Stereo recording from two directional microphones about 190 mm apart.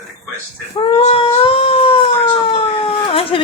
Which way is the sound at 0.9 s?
30° left (ahead or behind).